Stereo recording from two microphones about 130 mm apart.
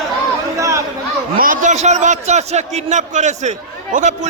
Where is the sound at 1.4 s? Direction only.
85° right; by 3.5 s 65° right (ahead or behind).